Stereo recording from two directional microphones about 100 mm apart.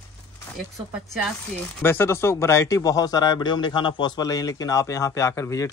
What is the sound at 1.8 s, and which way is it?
A man's voice, 25° left (ahead or behind).